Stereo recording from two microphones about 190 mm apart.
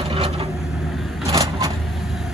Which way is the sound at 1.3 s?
15° right (ahead or behind).